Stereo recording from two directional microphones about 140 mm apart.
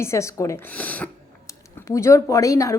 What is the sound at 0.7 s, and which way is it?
A woman's voice, 10° left (ahead or behind).